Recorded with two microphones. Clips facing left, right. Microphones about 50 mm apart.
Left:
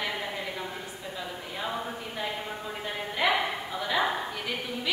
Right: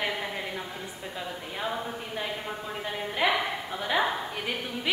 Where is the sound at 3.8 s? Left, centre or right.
Centre.